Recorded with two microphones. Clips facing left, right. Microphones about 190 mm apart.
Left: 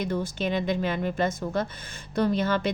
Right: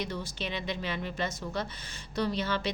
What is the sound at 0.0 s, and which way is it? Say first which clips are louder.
A woman's voice: left 8 dB; 50° left (ahead or behind).